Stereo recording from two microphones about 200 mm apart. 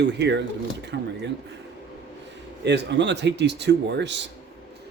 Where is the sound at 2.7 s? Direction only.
60° right (ahead or behind).